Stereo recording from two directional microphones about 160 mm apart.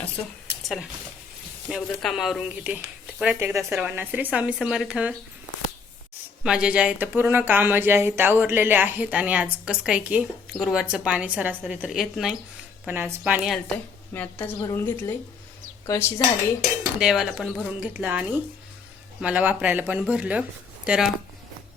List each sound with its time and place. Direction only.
1.7 s speech: centre (ahead or behind)
6.4 s speech: 5° right (ahead or behind)
13.7 s a woman's voice: 10° left (ahead or behind)
17.0 s speech: 5° right (ahead or behind)